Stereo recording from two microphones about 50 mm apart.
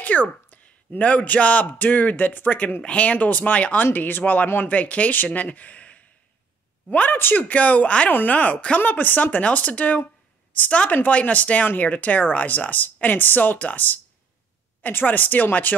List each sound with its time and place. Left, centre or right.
0.0 s speech: left